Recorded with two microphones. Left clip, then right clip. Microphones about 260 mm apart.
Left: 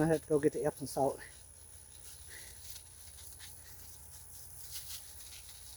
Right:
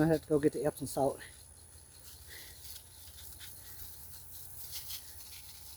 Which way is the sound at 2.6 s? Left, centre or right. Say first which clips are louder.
Right 1 dB; centre.